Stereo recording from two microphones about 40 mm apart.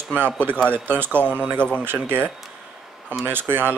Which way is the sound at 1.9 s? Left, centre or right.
Right.